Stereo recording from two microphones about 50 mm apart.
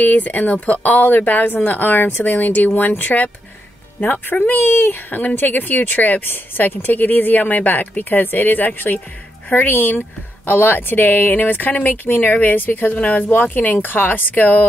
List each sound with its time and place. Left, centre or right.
0.0 s speech: left